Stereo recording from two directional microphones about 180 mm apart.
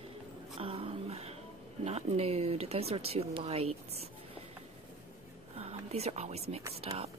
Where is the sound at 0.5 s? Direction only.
30° right (ahead or behind).